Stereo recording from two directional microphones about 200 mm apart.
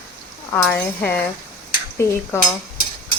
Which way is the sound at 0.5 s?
10° left (ahead or behind).